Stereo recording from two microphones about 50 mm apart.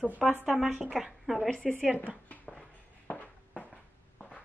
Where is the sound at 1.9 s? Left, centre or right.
Left.